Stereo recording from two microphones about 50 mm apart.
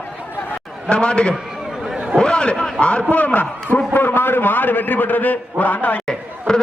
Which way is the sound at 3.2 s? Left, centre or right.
Left.